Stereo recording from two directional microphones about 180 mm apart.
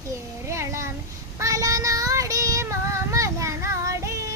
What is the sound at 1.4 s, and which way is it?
Female singing, 15° right (ahead or behind).